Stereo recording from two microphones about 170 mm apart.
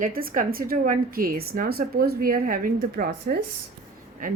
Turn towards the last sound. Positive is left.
turn(degrees=-55)  # may be behind; listen again after turning